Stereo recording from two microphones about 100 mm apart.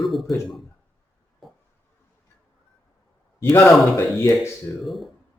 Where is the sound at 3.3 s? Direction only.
30° left (ahead or behind).